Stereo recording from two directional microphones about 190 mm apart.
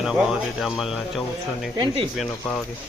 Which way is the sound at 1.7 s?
25° right (ahead or behind).